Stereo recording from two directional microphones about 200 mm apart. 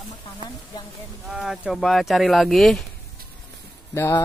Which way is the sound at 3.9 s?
15° left (ahead or behind).